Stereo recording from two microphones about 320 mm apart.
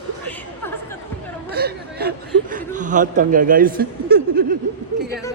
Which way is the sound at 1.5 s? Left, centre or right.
Right.